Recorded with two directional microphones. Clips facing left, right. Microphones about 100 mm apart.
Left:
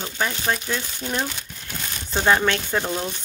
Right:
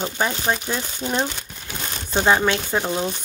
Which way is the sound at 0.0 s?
25° right (ahead or behind).